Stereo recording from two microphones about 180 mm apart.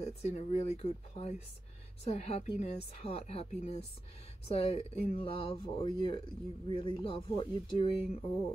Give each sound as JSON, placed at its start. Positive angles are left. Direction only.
{"t": 0.0, "sound": "speech", "side_deg": 35}